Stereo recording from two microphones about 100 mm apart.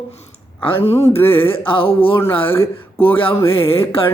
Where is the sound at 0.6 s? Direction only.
90° left.